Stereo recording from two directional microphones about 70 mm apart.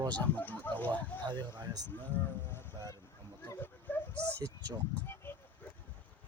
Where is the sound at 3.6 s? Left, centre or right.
Left.